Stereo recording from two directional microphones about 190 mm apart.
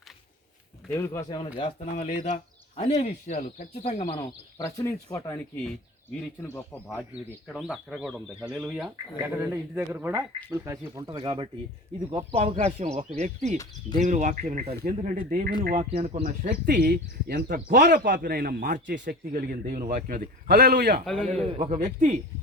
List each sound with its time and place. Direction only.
0.9 s speech: 15° left (ahead or behind)
1.5 s speech: 30° left (ahead or behind)
4.5 s speech: 15° left (ahead or behind)
7.1 s speech: 5° right (ahead or behind); by 14.7 s 40° right (ahead or behind)
14.7 s speech: 55° right (ahead or behind)
14.9 s speech: 40° right (ahead or behind)
16.2 s a man's voice: 50° right (ahead or behind)
19.3 s a man's voice: 50° right (ahead or behind)
21.5 s speech: 40° right (ahead or behind)